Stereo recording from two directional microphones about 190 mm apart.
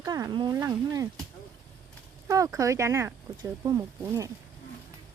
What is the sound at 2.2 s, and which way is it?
Speech, 15° right (ahead or behind).